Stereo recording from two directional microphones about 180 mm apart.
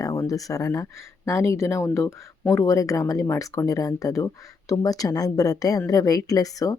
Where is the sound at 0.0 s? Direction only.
20° left (ahead or behind).